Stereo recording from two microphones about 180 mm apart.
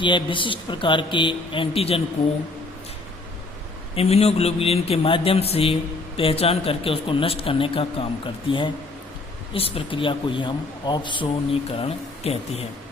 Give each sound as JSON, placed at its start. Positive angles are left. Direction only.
{"t": 0.0, "sound": "speech", "side_deg": 25}
{"t": 3.9, "sound": "speech", "side_deg": 35}